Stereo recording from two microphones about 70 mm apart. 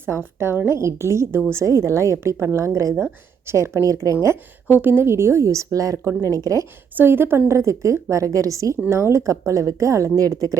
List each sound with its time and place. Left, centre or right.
0.3 s a woman's voice: right
4.8 s a woman's voice: right
6.9 s a woman's voice: right